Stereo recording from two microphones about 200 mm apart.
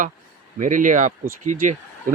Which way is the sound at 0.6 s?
40° right (ahead or behind).